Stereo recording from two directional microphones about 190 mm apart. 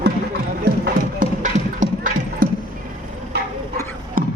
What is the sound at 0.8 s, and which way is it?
Clip-clop, 45° right (ahead or behind).